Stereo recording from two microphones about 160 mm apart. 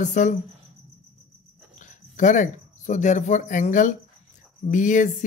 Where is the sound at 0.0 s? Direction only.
50° left (ahead or behind).